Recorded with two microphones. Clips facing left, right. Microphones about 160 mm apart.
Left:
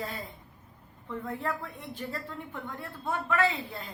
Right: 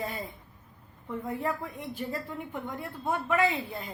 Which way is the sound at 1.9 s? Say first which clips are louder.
Right 2 dB; 15° right (ahead or behind).